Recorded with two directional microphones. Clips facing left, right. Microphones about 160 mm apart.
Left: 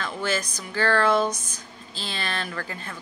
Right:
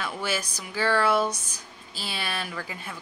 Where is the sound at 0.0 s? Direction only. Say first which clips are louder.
Left 2 dB; 10° right (ahead or behind).